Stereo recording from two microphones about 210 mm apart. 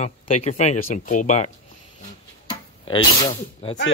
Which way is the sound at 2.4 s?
25° left (ahead or behind).